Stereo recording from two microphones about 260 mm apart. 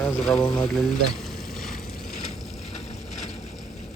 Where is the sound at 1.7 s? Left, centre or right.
Left.